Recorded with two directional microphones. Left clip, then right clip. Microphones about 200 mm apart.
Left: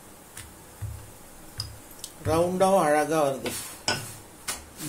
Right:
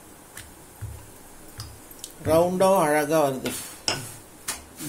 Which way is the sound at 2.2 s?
20° right (ahead or behind).